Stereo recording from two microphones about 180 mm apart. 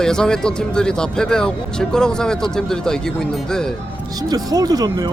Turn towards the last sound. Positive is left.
turn(degrees=-20)  # may be behind; listen again after turning